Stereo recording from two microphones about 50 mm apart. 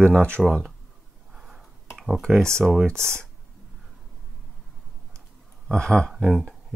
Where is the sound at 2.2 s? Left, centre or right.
Centre.